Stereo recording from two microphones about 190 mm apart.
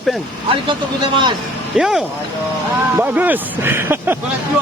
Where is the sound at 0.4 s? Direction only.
25° right (ahead or behind).